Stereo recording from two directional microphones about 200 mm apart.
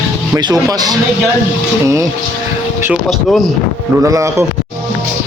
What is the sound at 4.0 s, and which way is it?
Speech, 15° right (ahead or behind).